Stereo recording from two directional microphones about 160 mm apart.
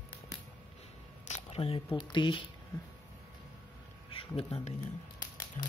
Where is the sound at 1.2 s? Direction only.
45° left (ahead or behind).